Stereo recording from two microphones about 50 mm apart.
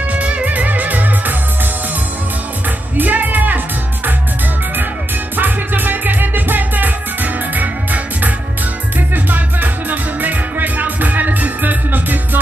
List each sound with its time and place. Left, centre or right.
0.1 s music: right
3.0 s music: right
5.3 s music: right